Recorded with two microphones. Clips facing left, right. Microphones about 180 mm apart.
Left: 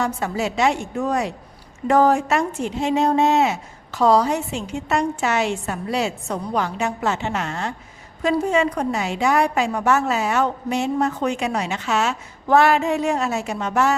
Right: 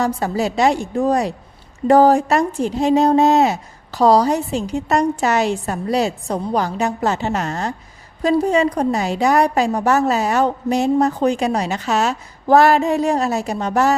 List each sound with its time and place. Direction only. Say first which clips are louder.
0.0 s a woman's voice: right 4 dB; 35° right (ahead or behind)